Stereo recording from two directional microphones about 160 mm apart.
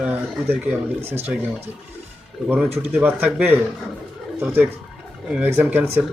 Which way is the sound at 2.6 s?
40° right (ahead or behind).